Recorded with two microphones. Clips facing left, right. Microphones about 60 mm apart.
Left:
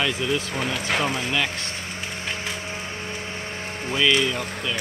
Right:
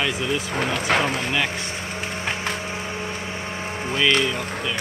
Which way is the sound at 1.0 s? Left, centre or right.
Centre.